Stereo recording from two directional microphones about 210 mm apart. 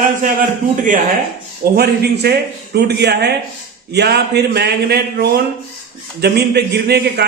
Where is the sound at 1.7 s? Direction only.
50° right (ahead or behind).